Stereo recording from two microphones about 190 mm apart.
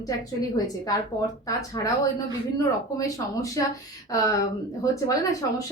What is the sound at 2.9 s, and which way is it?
A woman's voice, 20° left (ahead or behind).